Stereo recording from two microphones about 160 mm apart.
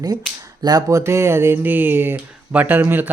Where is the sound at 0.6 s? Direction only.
25° right (ahead or behind).